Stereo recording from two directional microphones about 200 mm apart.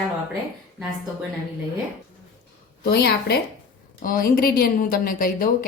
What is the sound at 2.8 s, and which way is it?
A woman's voice, 55° left (ahead or behind).